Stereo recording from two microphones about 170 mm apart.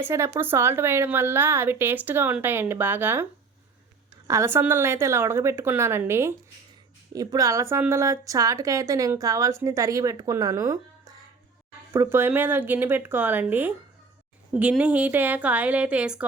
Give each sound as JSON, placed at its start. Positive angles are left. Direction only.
{"t": 0.0, "sound": "a woman's voice", "side_deg": -15}
{"t": 4.3, "sound": "a woman's voice", "side_deg": -15}